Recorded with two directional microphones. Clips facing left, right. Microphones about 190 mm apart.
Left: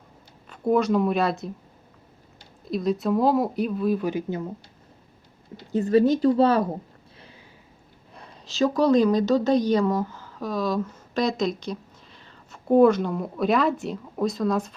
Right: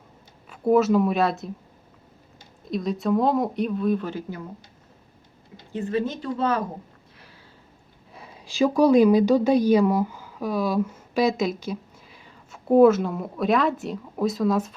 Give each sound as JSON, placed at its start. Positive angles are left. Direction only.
{"t": 0.5, "sound": "speech", "side_deg": -5}
{"t": 2.6, "sound": "speech", "side_deg": 0}
{"t": 5.7, "sound": "speech", "side_deg": 40}
{"t": 8.1, "sound": "speech", "side_deg": -5}